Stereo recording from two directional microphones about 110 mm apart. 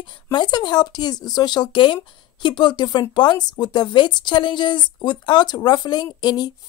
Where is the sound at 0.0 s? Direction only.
45° left (ahead or behind).